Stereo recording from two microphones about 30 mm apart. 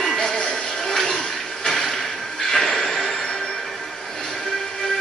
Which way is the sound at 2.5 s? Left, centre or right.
Centre.